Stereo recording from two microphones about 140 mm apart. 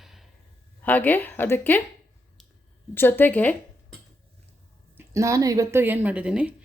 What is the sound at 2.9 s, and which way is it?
Speech, 15° left (ahead or behind).